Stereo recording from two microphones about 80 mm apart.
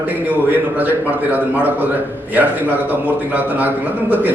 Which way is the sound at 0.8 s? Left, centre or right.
Right.